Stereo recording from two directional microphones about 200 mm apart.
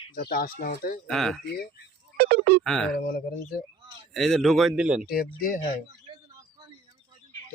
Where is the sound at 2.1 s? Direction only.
55° right (ahead or behind).